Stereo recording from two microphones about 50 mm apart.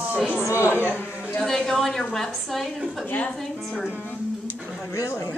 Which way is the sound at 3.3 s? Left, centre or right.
Centre.